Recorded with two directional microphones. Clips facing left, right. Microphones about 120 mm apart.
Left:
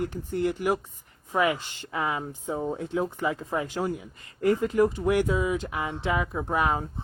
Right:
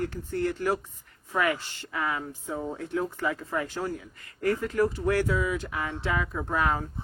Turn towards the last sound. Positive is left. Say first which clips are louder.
# left 1 dB
turn(degrees=15)  # may be behind; listen again after turning